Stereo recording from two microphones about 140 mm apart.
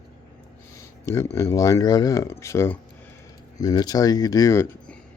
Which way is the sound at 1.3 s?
20° left (ahead or behind).